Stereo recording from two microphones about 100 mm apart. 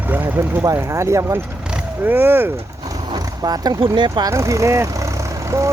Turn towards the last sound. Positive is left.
turn(degrees=-30)  # may be behind; listen again after turning